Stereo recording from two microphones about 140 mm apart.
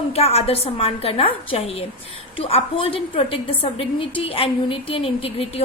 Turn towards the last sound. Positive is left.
turn(degrees=40)  # may be behind; listen again after turning